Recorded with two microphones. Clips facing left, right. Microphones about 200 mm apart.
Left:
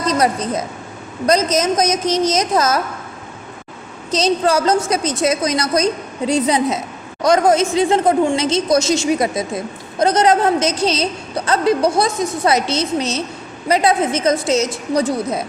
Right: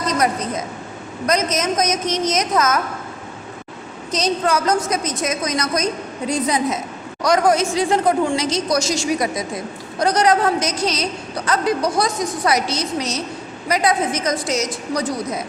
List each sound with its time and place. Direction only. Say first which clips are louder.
0.1 s a woman's voice: left 3 dB; 30° left (ahead or behind)
4.1 s a woman's voice: left 4 dB; 30° left (ahead or behind)